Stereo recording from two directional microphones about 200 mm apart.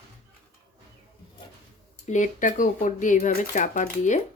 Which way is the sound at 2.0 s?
40° left (ahead or behind).